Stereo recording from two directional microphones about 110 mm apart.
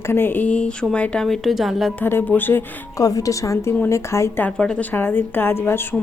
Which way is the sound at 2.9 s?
30° left (ahead or behind).